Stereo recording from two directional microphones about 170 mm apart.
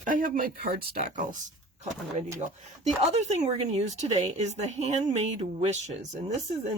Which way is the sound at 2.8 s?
40° right (ahead or behind).